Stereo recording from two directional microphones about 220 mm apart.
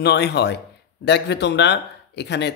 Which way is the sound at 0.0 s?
50° left (ahead or behind).